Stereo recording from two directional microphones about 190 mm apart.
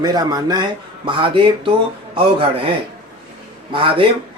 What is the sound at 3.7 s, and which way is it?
Speech, 25° right (ahead or behind).